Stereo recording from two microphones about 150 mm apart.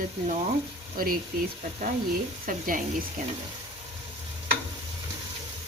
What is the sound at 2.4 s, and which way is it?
Speech, 65° right (ahead or behind).